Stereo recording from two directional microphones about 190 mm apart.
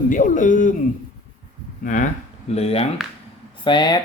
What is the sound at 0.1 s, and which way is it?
Speech, 40° left (ahead or behind).